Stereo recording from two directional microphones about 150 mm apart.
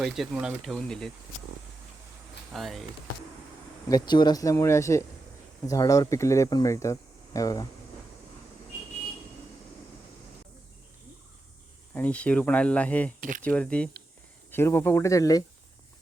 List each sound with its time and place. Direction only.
0.0 s speech: 5° right (ahead or behind)
2.5 s speech: centre (ahead or behind)
3.8 s speech: 25° left (ahead or behind)
11.9 s speech: 10° left (ahead or behind)